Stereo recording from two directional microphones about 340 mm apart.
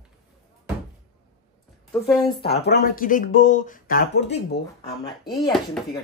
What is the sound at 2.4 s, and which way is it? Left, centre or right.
Speech, left.